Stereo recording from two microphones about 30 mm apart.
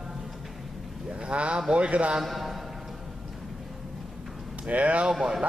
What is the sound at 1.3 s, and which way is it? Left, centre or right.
Speech, right.